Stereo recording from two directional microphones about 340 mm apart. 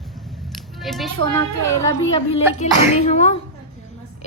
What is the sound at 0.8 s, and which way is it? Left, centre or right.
Speech, centre.